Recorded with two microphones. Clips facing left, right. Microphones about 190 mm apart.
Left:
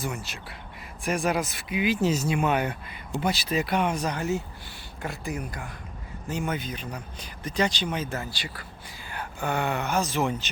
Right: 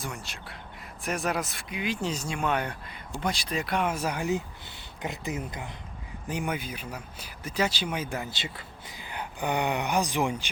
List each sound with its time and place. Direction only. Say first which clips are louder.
0.0 s speech: left 5 dB; centre (ahead or behind)